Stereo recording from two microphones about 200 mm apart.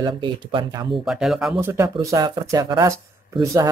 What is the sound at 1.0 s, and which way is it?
Speech, 5° right (ahead or behind).